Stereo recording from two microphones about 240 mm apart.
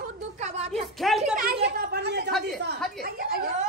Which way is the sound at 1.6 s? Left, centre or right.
Right.